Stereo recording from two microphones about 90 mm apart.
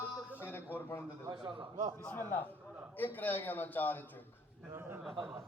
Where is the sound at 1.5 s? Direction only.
60° right (ahead or behind).